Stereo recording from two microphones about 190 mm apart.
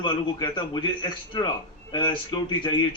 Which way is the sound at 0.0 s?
25° left (ahead or behind).